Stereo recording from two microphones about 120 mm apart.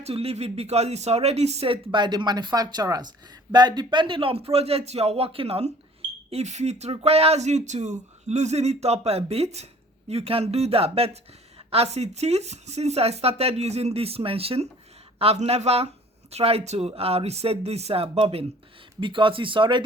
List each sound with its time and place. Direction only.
0.0 s speech: 55° right (ahead or behind)
6.3 s speech: 70° right (ahead or behind)
18.9 s speech: 45° right (ahead or behind)